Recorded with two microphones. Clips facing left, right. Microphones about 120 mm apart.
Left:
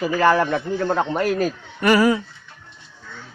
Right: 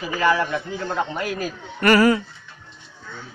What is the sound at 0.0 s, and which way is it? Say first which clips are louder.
Speech: left 4 dB; 45° left (ahead or behind).